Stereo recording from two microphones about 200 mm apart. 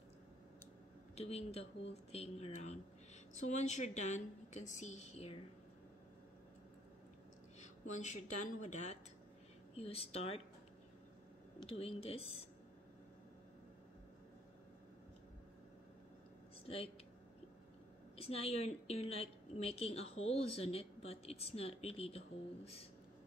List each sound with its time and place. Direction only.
1.1 s a woman's voice: 30° left (ahead or behind)
7.6 s a woman's voice: 35° left (ahead or behind)
11.6 s speech: 30° left (ahead or behind)
16.6 s speech: 30° left (ahead or behind)
18.1 s a woman's voice: 30° left (ahead or behind)